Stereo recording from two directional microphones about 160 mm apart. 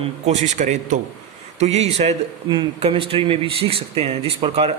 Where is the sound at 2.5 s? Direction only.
30° right (ahead or behind).